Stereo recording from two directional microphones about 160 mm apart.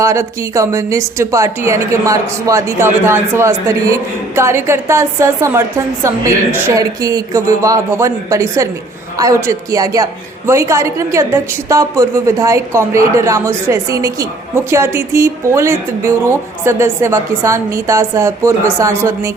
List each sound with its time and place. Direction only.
0.0 s a woman's voice: 20° right (ahead or behind)